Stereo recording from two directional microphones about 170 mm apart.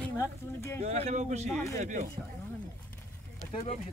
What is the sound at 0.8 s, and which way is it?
Speech, 40° right (ahead or behind).